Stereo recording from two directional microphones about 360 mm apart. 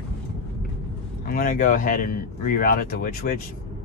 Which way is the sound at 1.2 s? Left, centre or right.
Left.